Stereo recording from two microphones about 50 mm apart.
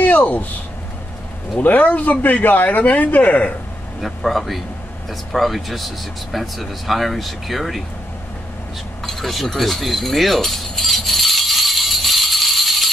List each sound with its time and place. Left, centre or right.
0.0 s a sound: left
1.6 s speech: left
4.0 s speech: centre
9.0 s keys jangling: centre